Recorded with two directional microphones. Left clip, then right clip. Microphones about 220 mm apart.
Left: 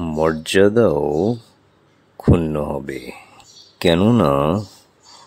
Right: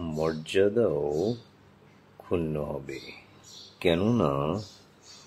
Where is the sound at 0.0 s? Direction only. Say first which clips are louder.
Left 11 dB; 50° left (ahead or behind).